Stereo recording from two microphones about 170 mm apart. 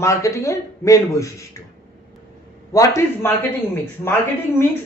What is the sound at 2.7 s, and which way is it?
Speech, 20° left (ahead or behind).